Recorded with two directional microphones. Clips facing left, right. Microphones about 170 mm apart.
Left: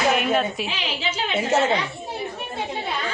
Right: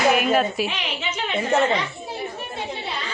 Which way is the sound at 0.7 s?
30° left (ahead or behind).